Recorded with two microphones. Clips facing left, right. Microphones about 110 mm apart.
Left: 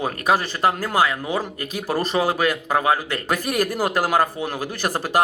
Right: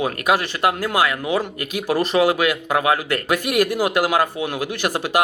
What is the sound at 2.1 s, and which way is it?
Speech, 35° left (ahead or behind).